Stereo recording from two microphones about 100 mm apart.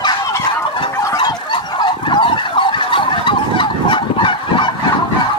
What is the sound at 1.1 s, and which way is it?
Fowl, 50° left (ahead or behind).